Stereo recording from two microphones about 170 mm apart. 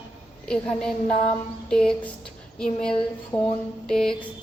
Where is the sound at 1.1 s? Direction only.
45° left (ahead or behind).